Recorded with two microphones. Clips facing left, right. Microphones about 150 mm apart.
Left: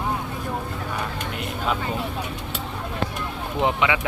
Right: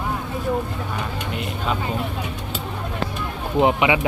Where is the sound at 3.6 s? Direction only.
15° right (ahead or behind).